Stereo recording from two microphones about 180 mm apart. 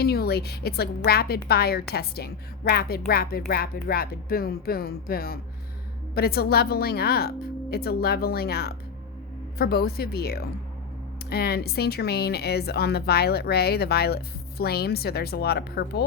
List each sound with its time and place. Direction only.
0.0 s speech: 60° left (ahead or behind)